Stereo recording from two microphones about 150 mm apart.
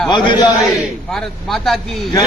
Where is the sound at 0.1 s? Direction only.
30° left (ahead or behind).